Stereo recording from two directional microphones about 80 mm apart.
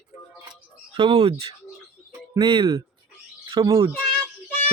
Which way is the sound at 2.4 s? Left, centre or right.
Right.